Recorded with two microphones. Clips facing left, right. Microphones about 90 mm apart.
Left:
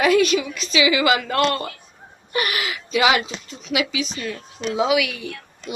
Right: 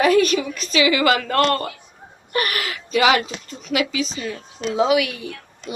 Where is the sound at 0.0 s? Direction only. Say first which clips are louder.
Right 1 dB; 40° right (ahead or behind).